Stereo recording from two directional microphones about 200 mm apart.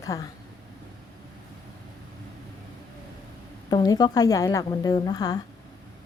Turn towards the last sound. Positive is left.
turn(degrees=20)  # may be behind; listen again after turning